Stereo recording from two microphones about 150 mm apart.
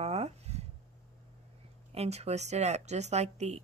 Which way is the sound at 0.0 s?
45° right (ahead or behind).